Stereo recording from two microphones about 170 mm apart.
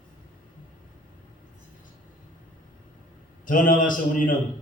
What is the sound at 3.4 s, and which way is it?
Speech, 50° left (ahead or behind).